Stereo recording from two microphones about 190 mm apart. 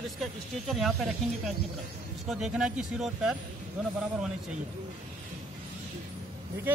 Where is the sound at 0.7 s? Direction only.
Centre (ahead or behind).